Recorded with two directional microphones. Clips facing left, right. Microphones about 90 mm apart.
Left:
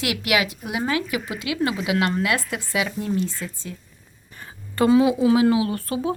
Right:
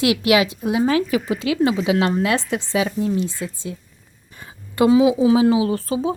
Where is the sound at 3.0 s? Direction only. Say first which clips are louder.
Right 3 dB; 15° right (ahead or behind).